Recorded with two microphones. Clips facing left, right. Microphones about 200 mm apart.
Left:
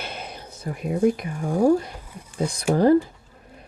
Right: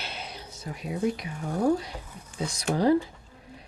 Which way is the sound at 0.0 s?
50° left (ahead or behind).